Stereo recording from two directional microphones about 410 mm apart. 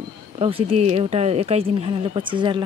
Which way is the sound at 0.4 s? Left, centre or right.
Centre.